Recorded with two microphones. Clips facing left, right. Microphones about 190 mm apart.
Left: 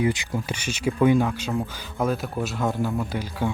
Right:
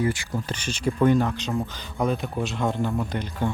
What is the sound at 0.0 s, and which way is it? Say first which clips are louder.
Speech: left 1 dB; 15° left (ahead or behind).